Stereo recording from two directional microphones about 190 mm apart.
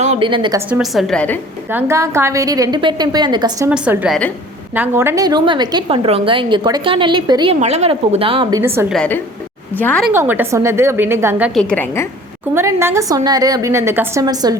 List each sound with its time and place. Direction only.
0.0 s a woman's voice: 35° right (ahead or behind)
0.3 s a woman's voice: 25° right (ahead or behind)
0.7 s a woman's voice: centre (ahead or behind)
1.7 s a woman's voice: 15° right (ahead or behind)
3.7 s a woman's voice: 5° right (ahead or behind); by 7.5 s 25° right (ahead or behind)
7.6 s a woman's voice: 35° right (ahead or behind); by 8.9 s 15° right (ahead or behind)
8.9 s a woman's voice: 5° left (ahead or behind)
10.1 s a woman's voice: 10° right (ahead or behind)
11.7 s a woman's voice: 10° left (ahead or behind)
12.5 s a woman's voice: 15° right (ahead or behind)